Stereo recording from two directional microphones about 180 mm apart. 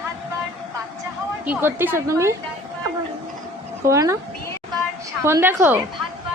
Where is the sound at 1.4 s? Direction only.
10° right (ahead or behind).